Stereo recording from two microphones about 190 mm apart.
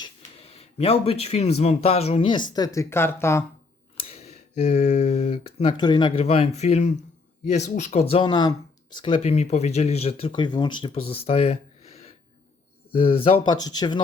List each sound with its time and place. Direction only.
0.0 s speech: 30° left (ahead or behind); by 3.4 s 15° left (ahead or behind)
4.0 s speech: 35° left (ahead or behind)
8.1 s speech: 25° left (ahead or behind)